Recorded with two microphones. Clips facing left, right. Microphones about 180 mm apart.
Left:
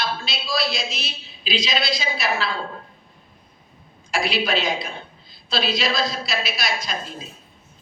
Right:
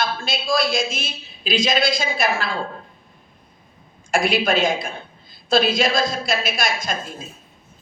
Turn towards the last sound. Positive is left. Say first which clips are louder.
# right 3 dB
turn(degrees=-50)  # may be behind; listen again after turning